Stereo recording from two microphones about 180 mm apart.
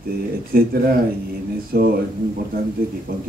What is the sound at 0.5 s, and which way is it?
Speech, 55° right (ahead or behind).